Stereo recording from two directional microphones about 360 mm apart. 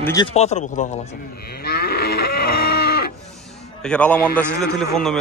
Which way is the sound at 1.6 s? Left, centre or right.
Left.